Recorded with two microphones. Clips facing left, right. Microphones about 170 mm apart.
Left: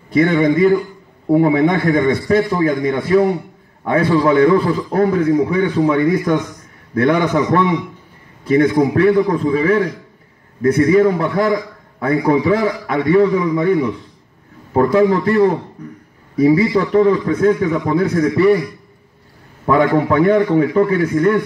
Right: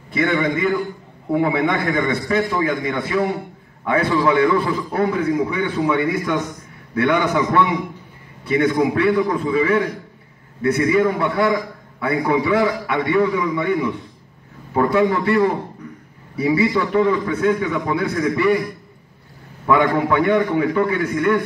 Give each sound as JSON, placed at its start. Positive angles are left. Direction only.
{"t": 0.1, "sound": "a man's voice", "side_deg": 40}
{"t": 19.6, "sound": "a man's voice", "side_deg": 40}